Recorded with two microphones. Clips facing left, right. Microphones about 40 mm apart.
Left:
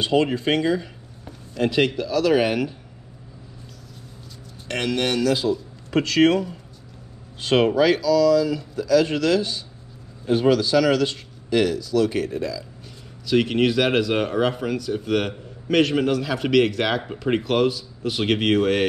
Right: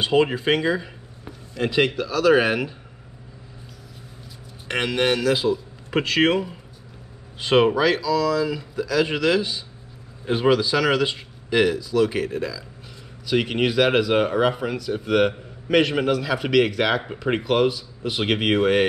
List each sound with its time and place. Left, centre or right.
0.0 s speech: centre
4.6 s speech: centre